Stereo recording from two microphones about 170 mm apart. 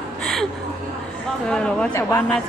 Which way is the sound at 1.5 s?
5° left (ahead or behind).